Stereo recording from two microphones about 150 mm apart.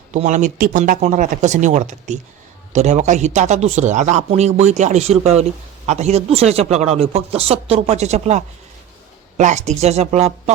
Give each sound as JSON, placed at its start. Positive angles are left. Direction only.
{"t": 0.1, "sound": "a man's voice", "side_deg": -55}